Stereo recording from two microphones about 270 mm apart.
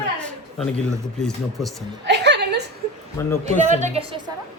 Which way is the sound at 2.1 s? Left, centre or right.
Right.